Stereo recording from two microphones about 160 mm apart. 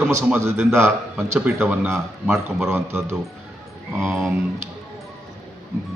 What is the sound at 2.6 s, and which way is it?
Speech, 15° right (ahead or behind).